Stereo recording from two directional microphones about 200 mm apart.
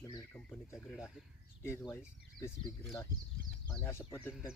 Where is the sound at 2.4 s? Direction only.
15° left (ahead or behind).